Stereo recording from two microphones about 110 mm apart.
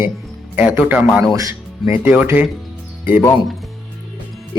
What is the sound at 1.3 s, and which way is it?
Speech, 30° right (ahead or behind).